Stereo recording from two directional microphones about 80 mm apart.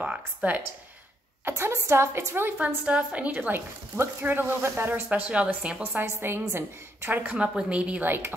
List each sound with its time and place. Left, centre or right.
0.0 s speech: centre
1.5 s a woman's voice: right
2.5 s speech: centre